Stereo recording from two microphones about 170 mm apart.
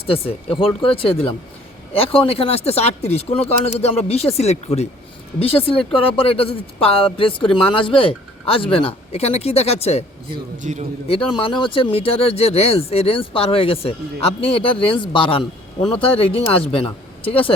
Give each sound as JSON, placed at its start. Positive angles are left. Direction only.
{"t": 0.0, "sound": "speech", "side_deg": 35}
{"t": 10.6, "sound": "a man's voice", "side_deg": -45}
{"t": 11.1, "sound": "speech", "side_deg": 30}